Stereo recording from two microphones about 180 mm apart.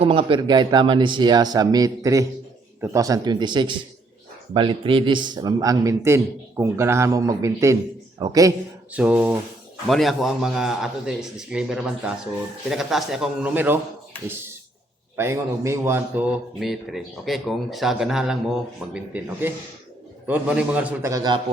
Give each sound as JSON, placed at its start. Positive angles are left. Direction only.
{"t": 0.0, "sound": "a man's voice", "side_deg": -30}
{"t": 8.9, "sound": "a man's voice", "side_deg": -10}